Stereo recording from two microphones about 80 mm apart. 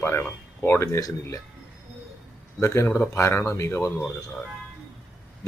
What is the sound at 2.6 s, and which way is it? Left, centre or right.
Speech, left.